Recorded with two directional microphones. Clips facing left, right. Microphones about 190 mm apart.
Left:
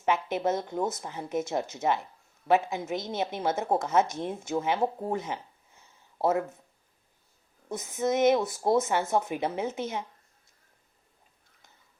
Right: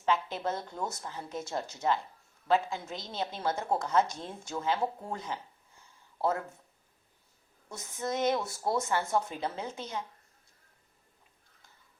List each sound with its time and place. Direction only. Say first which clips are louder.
0.0 s a woman's voice: left 4 dB; 20° left (ahead or behind)
5.1 s a sound: left 6 dB; 20° left (ahead or behind)
7.7 s a woman's voice: left 7 dB; 20° left (ahead or behind)